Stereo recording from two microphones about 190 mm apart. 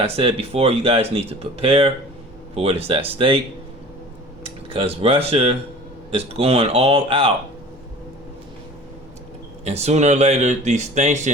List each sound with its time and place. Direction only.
0.0 s speech: 30° right (ahead or behind)
4.4 s speech: 30° right (ahead or behind)
9.6 s speech: 35° right (ahead or behind)